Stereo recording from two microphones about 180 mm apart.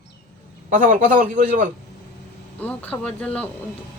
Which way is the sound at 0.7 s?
50° right (ahead or behind).